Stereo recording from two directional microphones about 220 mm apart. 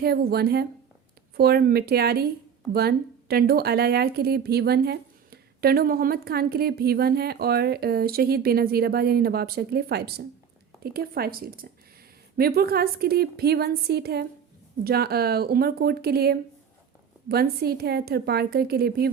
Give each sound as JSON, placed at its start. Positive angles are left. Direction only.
{"t": 0.0, "sound": "speech", "side_deg": -45}